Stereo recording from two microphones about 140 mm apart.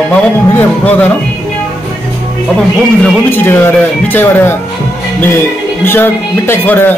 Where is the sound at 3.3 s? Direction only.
15° left (ahead or behind).